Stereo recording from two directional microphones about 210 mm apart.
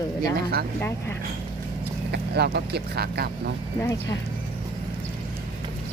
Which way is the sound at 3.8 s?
15° left (ahead or behind).